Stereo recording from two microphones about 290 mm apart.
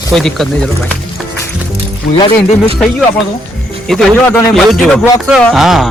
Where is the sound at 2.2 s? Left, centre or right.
Centre.